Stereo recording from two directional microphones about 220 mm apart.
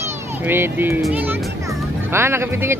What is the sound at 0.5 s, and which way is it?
A child's voice, 10° right (ahead or behind).